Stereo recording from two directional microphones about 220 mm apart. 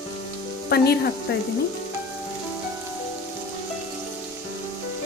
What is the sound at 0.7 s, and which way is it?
Speech, 45° left (ahead or behind).